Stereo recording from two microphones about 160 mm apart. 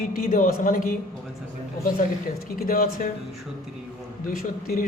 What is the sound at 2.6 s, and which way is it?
Speech, 65° left (ahead or behind).